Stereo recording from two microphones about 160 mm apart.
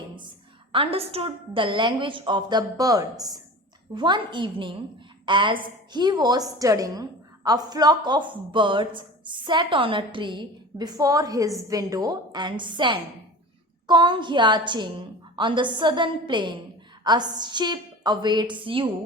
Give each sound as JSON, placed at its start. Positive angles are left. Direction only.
{"t": 0.7, "sound": "a woman's voice", "side_deg": -35}